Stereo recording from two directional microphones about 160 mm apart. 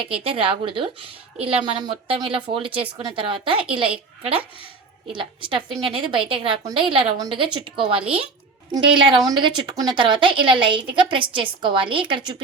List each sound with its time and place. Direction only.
0.0 s a woman's voice: 35° right (ahead or behind)